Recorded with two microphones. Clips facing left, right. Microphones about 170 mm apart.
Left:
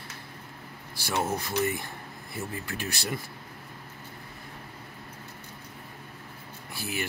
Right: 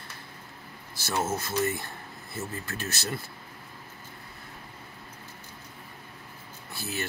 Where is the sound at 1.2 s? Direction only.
15° left (ahead or behind).